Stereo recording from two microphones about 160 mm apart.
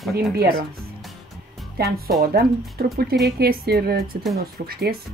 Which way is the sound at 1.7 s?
75° right (ahead or behind).